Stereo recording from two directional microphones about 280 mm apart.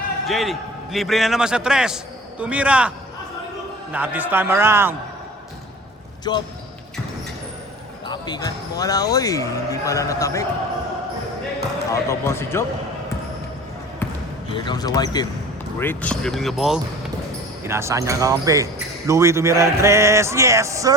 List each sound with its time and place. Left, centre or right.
0.3 s a man's voice: centre
3.9 s speech: centre
6.3 s speech: centre
8.0 s speech: centre
11.9 s speech: centre
14.5 s a man's voice: centre